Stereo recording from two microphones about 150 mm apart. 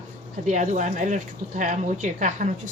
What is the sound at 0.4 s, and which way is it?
Speech, 55° right (ahead or behind).